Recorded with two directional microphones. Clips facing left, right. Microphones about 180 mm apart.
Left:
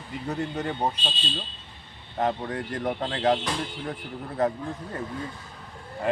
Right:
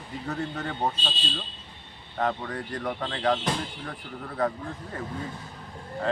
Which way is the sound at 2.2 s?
20° left (ahead or behind).